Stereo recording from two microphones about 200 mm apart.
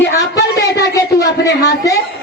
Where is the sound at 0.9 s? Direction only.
15° left (ahead or behind).